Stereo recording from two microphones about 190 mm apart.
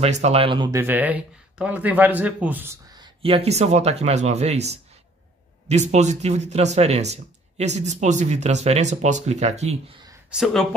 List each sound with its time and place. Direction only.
0.0 s speech: 35° right (ahead or behind)
0.7 s speech: 10° right (ahead or behind); by 9.8 s 35° right (ahead or behind)
10.3 s speech: centre (ahead or behind)